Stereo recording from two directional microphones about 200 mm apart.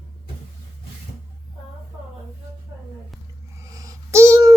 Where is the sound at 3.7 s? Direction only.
15° right (ahead or behind).